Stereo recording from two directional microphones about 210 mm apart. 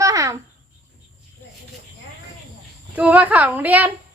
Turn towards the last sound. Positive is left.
turn(degrees=-10)  # may be behind; listen again after turning